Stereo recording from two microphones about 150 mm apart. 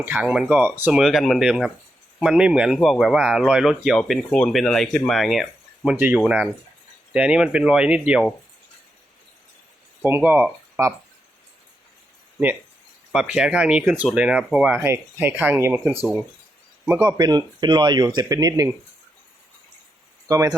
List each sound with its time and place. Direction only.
0.0 s speech: 10° right (ahead or behind)
10.0 s speech: 10° right (ahead or behind)
13.1 s speech: 5° right (ahead or behind)
16.8 s speech: 10° right (ahead or behind)
17.2 s speech: 30° right (ahead or behind)
20.2 s speech: 20° right (ahead or behind)